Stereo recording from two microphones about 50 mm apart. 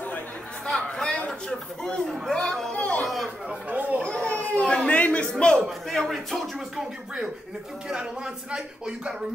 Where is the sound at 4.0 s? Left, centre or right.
Left.